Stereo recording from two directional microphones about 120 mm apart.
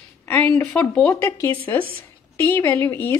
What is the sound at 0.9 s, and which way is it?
Speech, 10° left (ahead or behind).